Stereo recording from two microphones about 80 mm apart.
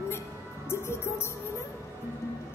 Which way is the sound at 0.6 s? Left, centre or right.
Left.